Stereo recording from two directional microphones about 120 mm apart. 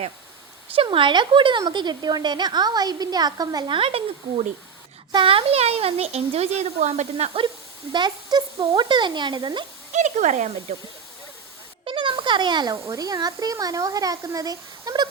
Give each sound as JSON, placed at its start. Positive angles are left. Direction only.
{"t": 0.8, "sound": "a woman's voice", "side_deg": -45}
{"t": 5.1, "sound": "speech", "side_deg": -45}
{"t": 7.9, "sound": "a woman's voice", "side_deg": -35}
{"t": 9.9, "sound": "speech", "side_deg": -85}
{"t": 11.9, "sound": "a sound", "side_deg": -45}
{"t": 12.7, "sound": "speech", "side_deg": -25}